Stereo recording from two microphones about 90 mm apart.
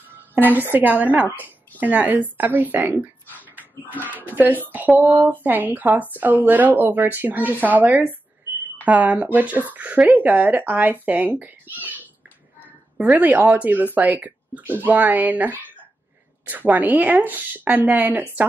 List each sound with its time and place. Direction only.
0.1 s speech: 20° right (ahead or behind)
12.9 s speech: centre (ahead or behind)
13.2 s speech: 20° right (ahead or behind)